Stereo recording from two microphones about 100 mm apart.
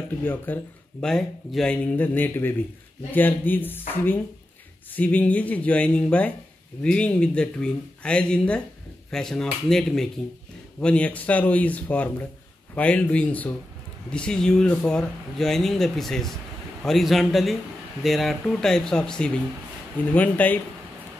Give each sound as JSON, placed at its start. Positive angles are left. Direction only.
{"t": 0.2, "sound": "speech", "side_deg": 15}
{"t": 1.0, "sound": "speech", "side_deg": 5}